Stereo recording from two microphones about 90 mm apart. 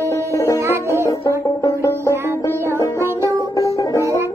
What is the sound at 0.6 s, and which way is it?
Music, 30° right (ahead or behind).